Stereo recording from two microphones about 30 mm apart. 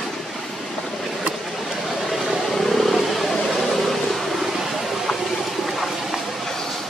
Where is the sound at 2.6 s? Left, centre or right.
Centre.